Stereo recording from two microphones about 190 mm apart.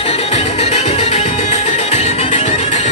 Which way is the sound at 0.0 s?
30° left (ahead or behind).